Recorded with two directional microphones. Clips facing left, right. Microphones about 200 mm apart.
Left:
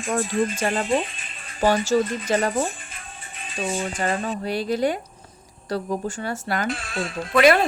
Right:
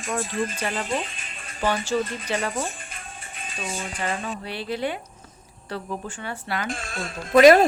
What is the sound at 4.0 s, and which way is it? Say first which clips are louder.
Speech: left 2 dB; 40° left (ahead or behind).